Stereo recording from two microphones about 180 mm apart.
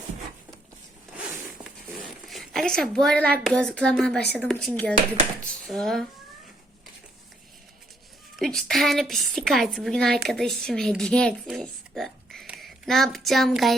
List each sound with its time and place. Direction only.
1.6 s a sound: centre (ahead or behind)
3.4 s a woman's voice: 5° left (ahead or behind)
8.4 s a woman's voice: centre (ahead or behind)